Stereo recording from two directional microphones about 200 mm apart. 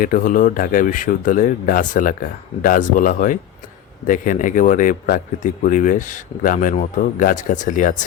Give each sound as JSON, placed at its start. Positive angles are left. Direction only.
{"t": 0.0, "sound": "speech", "side_deg": 45}